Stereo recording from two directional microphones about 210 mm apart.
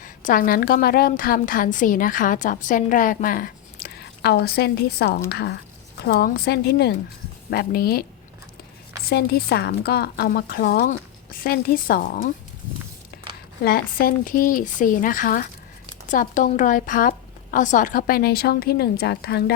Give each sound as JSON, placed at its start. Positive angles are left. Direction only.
{"t": 0.0, "sound": "a woman's voice", "side_deg": 40}
{"t": 9.0, "sound": "a woman's voice", "side_deg": 50}
{"t": 13.6, "sound": "a woman's voice", "side_deg": 45}